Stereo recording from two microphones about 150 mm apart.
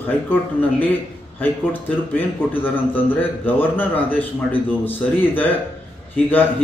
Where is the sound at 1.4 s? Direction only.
10° left (ahead or behind).